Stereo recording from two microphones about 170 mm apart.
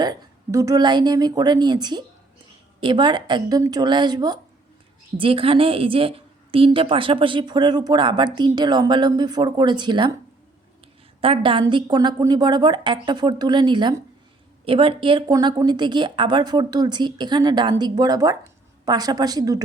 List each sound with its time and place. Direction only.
0.0 s a woman's voice: 20° right (ahead or behind)
11.2 s a woman's voice: 30° right (ahead or behind)